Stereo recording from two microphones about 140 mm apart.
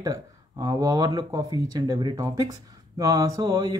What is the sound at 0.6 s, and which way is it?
Speech, 25° right (ahead or behind).